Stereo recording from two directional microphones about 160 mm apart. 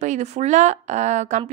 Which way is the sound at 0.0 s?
45° right (ahead or behind).